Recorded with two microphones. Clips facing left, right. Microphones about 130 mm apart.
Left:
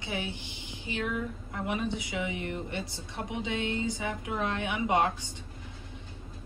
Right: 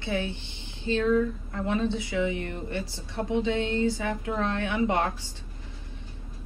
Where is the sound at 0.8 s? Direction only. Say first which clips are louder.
Right 10 dB; 15° left (ahead or behind).